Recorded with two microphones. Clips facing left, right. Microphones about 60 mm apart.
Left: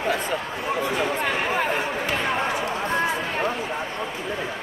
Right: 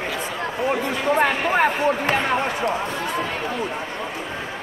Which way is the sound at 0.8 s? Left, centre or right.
Right.